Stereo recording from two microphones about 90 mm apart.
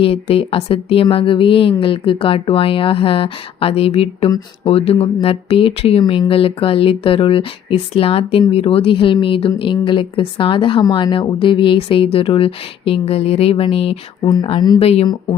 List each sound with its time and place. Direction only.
0.0 s a woman's voice: 90° left